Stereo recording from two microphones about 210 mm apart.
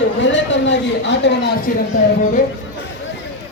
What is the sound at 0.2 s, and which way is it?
A man's voice, 60° left (ahead or behind).